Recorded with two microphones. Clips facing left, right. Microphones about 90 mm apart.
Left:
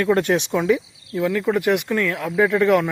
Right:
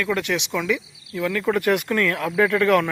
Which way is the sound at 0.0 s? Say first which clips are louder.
Left 6 dB; 35° left (ahead or behind).